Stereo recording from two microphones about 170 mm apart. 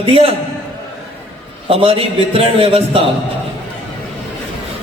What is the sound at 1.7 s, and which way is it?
Speech, 35° right (ahead or behind).